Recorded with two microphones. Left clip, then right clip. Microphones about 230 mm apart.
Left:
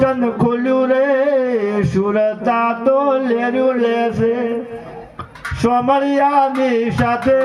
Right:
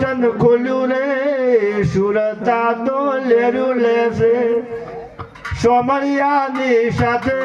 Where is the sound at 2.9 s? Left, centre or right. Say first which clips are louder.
Even; left.